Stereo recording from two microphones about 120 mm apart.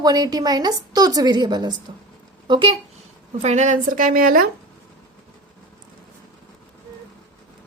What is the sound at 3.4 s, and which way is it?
Speech, 70° right (ahead or behind).